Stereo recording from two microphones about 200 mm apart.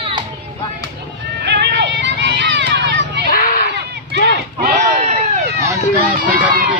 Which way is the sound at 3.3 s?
45° left (ahead or behind).